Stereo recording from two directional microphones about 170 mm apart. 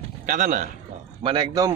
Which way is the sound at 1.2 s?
25° right (ahead or behind).